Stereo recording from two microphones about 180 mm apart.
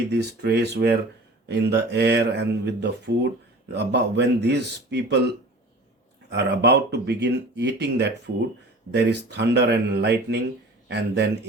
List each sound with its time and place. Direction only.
0.1 s speech: 65° right (ahead or behind)
6.3 s speech: 70° right (ahead or behind)